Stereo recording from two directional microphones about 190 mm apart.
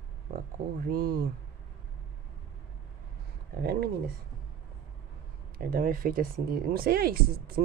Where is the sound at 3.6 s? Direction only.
55° right (ahead or behind).